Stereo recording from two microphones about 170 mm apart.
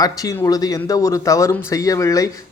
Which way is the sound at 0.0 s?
20° left (ahead or behind).